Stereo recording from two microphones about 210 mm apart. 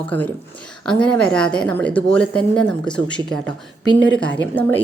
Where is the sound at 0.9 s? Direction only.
5° left (ahead or behind).